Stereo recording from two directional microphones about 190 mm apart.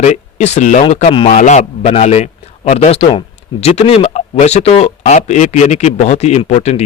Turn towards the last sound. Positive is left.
turn(degrees=35)  # may be behind; listen again after turning